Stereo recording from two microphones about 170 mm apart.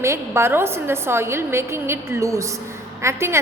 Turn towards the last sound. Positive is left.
turn(degrees=-15)  # may be behind; listen again after turning